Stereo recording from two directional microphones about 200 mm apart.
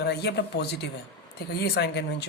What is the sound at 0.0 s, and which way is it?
Speech, 55° left (ahead or behind).